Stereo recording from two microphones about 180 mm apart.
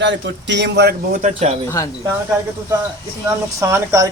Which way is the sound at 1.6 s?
15° left (ahead or behind).